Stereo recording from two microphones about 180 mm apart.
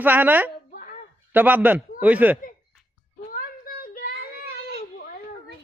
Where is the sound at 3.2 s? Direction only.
55° left (ahead or behind).